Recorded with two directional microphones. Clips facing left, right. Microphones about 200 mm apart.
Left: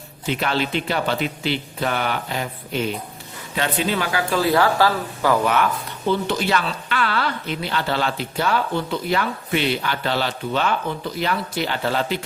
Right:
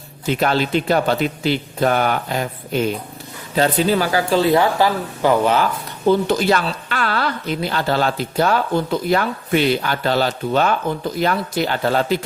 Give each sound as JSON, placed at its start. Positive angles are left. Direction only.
{"t": 0.3, "sound": "a woman's voice", "side_deg": -45}
{"t": 4.4, "sound": "speech", "side_deg": -20}
{"t": 6.1, "sound": "a woman's voice", "side_deg": -40}